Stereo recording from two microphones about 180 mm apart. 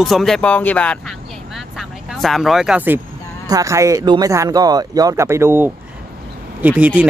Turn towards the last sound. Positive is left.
turn(degrees=-10)  # may be behind; listen again after turning